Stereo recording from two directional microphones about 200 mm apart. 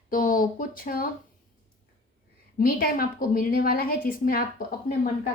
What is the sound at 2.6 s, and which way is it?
A woman's voice, 45° left (ahead or behind).